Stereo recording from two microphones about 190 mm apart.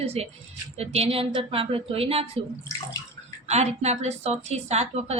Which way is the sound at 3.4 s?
35° right (ahead or behind).